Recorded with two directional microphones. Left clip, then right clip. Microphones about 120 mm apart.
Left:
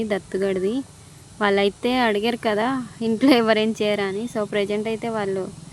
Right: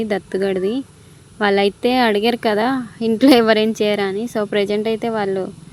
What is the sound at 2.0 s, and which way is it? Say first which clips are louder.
A woman's voice: right 3 dB; 35° right (ahead or behind).